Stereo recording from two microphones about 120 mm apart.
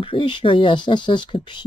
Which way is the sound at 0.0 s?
45° left (ahead or behind).